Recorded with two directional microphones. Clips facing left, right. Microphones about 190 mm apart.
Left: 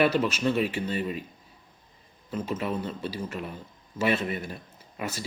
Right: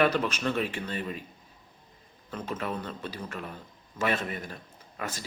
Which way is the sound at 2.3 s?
10° left (ahead or behind).